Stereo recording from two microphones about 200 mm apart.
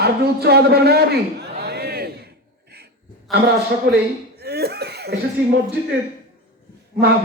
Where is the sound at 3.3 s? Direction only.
Centre (ahead or behind).